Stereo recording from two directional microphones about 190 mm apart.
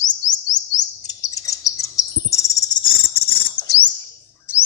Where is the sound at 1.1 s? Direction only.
20° left (ahead or behind).